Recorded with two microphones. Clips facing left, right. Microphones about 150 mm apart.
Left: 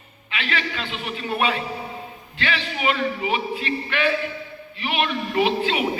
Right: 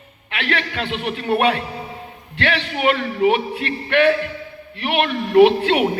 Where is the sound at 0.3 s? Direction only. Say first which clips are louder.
Right 4 dB; 65° right (ahead or behind).